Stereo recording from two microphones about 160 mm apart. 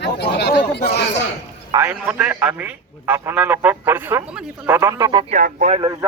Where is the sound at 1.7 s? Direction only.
15° right (ahead or behind).